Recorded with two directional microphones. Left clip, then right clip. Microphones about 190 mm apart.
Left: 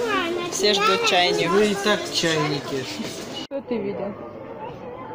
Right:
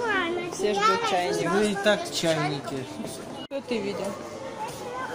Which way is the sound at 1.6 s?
30° right (ahead or behind).